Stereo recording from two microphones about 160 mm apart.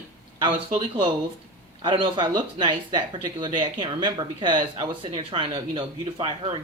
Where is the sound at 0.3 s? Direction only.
30° right (ahead or behind).